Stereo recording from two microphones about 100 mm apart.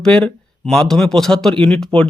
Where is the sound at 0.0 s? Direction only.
5° left (ahead or behind).